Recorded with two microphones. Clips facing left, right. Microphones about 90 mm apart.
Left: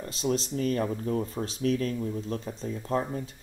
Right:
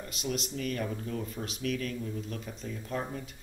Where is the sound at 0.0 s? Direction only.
35° left (ahead or behind).